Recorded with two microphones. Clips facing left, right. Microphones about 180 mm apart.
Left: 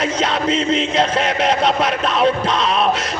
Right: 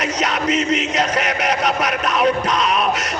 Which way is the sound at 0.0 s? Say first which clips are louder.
Left 2 dB; 30° left (ahead or behind).